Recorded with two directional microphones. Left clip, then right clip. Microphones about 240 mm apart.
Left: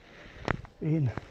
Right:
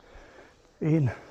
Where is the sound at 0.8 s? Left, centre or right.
Right.